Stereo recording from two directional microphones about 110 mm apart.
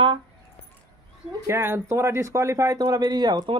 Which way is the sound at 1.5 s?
20° right (ahead or behind).